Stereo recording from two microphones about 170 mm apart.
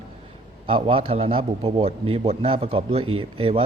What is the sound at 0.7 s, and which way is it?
A man's voice, 35° right (ahead or behind).